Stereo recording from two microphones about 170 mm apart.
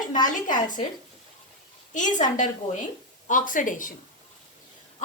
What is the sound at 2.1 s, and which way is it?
A woman's voice, 50° left (ahead or behind).